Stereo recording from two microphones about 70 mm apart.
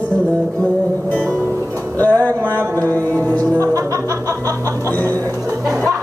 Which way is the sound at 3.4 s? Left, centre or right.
Right.